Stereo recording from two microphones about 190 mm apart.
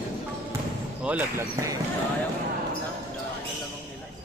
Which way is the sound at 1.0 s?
10° right (ahead or behind).